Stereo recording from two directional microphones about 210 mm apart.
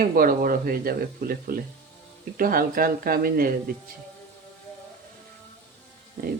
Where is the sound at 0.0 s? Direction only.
45° right (ahead or behind).